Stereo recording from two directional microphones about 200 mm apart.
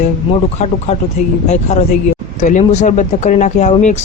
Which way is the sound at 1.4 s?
35° left (ahead or behind).